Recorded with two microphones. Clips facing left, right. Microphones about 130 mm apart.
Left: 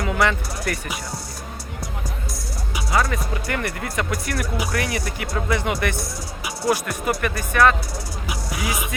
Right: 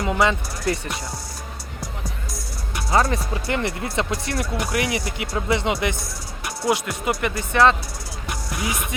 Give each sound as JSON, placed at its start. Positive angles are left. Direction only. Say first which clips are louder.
{"t": 0.0, "sound": "speech", "louder": "right 1 dB", "side_deg": -20}
{"t": 2.9, "sound": "speech", "louder": "right 2 dB", "side_deg": -30}
{"t": 8.3, "sound": "music", "louder": "even", "side_deg": 5}